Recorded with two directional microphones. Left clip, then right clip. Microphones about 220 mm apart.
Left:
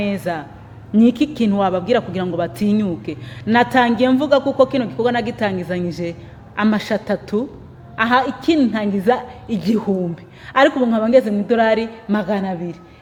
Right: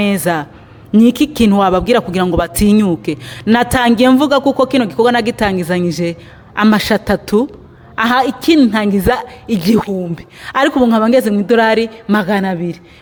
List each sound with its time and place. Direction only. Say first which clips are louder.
0.0 s a man's voice: right 7 dB; 40° right (ahead or behind)